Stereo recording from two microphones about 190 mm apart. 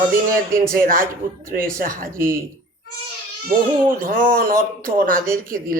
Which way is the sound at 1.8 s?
55° right (ahead or behind).